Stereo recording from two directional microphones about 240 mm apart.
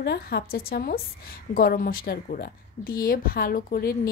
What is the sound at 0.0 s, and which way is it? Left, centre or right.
A woman's voice, left.